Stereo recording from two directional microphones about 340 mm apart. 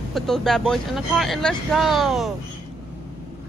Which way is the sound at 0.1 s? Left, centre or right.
Centre.